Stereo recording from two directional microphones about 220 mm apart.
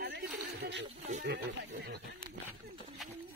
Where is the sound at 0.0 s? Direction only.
45° right (ahead or behind).